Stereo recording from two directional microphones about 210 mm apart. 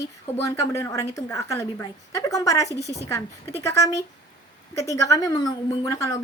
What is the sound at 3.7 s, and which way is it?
A woman's voice, 15° left (ahead or behind).